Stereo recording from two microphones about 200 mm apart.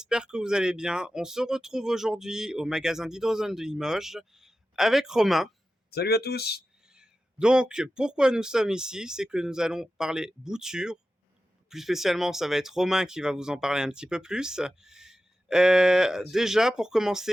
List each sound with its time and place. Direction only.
0.0 s speech: 5° right (ahead or behind)
5.9 s speech: 55° left (ahead or behind)
6.9 s speech: 5° right (ahead or behind)